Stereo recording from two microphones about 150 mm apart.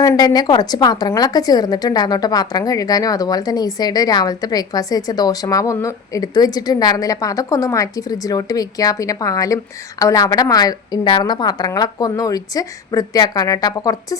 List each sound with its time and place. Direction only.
0.0 s a woman's voice: 25° left (ahead or behind)